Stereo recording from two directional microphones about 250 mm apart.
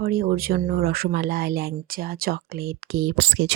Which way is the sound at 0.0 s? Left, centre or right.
Right.